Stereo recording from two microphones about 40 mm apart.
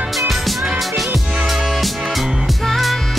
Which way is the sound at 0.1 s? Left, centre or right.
Centre.